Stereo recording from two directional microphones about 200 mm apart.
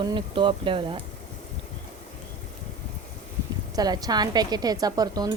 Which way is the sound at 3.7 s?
20° right (ahead or behind).